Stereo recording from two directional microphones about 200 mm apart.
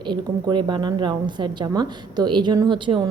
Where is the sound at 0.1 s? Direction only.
20° right (ahead or behind).